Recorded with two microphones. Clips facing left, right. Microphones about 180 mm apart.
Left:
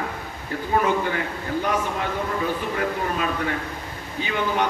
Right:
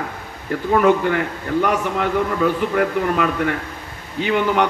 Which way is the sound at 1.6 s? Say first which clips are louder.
Right 5 dB; 70° right (ahead or behind).